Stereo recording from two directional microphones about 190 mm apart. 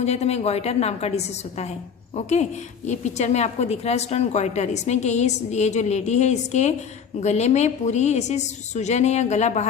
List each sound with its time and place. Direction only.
0.0 s a woman's voice: 35° left (ahead or behind)